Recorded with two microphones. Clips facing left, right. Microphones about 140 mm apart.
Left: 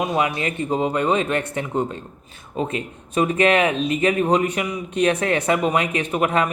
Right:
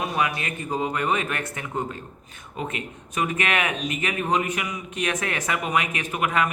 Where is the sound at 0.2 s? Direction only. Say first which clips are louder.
Left 4 dB; 30° left (ahead or behind).